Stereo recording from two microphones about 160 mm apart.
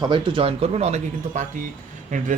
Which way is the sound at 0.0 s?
30° right (ahead or behind).